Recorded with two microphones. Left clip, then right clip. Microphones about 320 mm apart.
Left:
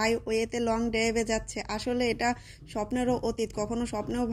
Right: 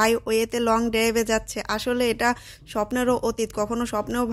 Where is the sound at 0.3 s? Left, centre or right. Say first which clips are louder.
Right 7 dB; right.